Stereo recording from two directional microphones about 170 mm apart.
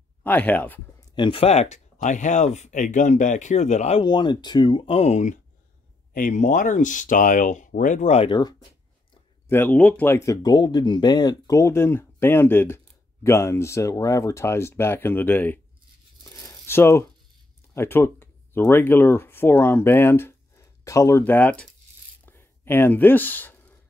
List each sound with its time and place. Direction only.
0.2 s speech: 10° left (ahead or behind)
1.1 s speech: 30° left (ahead or behind)
4.0 s speech: 25° left (ahead or behind); by 8.3 s 45° left (ahead or behind)
8.3 s speech: 25° left (ahead or behind)
9.5 s speech: 10° left (ahead or behind)
16.3 s a sound: 20° left (ahead or behind)
17.7 s speech: 15° left (ahead or behind)
22.2 s a sound: 15° left (ahead or behind)